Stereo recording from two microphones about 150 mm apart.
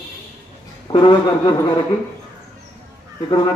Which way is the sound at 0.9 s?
35° left (ahead or behind).